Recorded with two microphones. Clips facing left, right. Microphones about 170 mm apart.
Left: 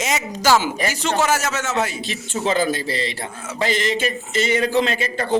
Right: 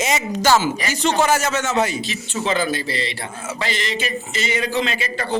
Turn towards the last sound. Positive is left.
turn(degrees=45)  # may be behind; listen again after turning